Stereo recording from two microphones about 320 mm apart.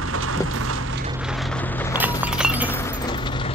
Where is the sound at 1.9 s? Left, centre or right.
Centre.